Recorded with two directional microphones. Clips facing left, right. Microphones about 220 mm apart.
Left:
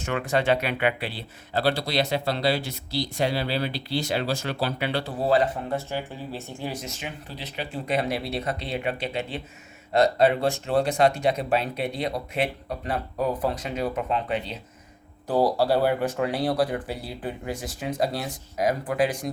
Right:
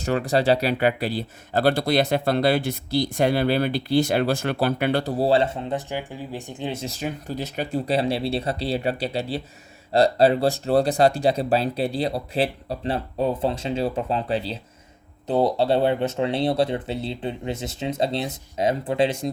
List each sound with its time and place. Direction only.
0.0 s speech: 35° right (ahead or behind)